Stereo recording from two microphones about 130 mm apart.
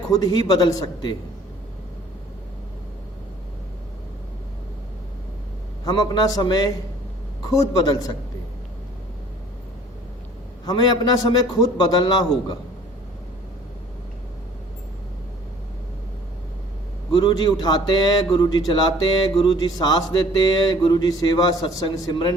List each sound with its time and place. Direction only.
0.1 s a man's voice: 30° left (ahead or behind)
5.8 s a man's voice: 30° left (ahead or behind)
10.7 s a man's voice: 30° left (ahead or behind)
17.1 s a man's voice: 35° left (ahead or behind)